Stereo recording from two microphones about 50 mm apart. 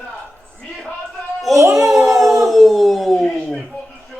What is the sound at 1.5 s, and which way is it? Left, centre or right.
Speech, right.